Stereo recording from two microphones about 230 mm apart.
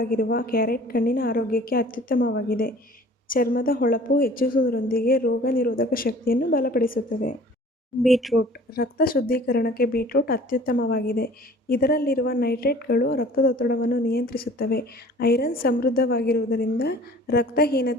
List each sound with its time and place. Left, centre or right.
0.0 s a woman's voice: left
8.0 s speech: centre
8.4 s a woman's voice: left